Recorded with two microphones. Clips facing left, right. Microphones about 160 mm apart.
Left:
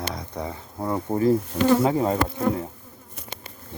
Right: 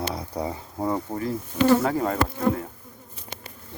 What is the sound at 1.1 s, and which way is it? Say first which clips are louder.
Speech: left 8 dB; 25° left (ahead or behind).